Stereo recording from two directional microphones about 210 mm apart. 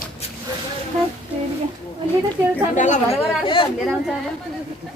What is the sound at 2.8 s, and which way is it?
Speech, 30° left (ahead or behind).